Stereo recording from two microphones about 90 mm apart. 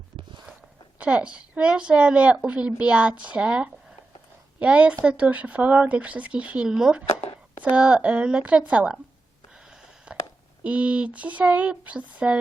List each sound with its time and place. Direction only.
0.9 s a woman's voice: 15° right (ahead or behind)
10.1 s a sound: 10° right (ahead or behind)
10.6 s a woman's voice: 15° right (ahead or behind)